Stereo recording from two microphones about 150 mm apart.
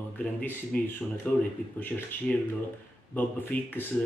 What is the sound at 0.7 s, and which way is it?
Speech, 10° left (ahead or behind).